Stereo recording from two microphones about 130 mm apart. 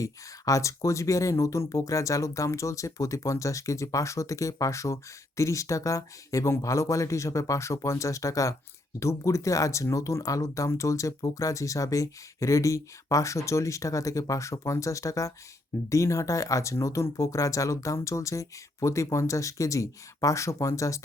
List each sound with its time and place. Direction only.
0.0 s speech: 25° left (ahead or behind)